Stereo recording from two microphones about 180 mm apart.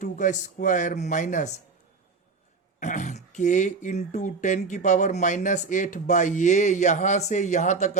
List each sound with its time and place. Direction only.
0.0 s speech: 45° left (ahead or behind)
2.8 s speech: 45° left (ahead or behind)